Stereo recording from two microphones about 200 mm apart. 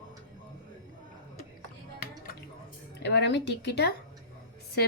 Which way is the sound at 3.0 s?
60° left (ahead or behind).